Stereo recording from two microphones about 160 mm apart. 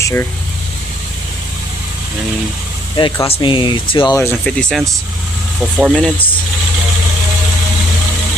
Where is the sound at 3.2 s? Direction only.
35° left (ahead or behind).